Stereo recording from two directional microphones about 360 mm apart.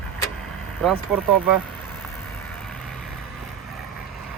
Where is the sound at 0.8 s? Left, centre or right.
Centre.